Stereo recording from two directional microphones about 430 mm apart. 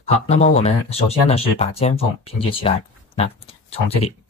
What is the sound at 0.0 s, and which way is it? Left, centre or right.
Speech, centre.